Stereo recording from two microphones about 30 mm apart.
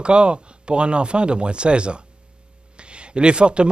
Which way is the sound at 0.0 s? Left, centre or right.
Right.